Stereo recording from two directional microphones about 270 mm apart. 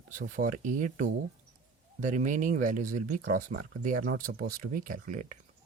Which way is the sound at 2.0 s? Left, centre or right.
Right.